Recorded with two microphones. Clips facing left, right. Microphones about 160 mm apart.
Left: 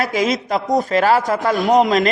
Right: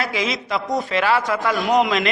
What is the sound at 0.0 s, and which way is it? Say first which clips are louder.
A man's voice: left 5 dB; 45° left (ahead or behind).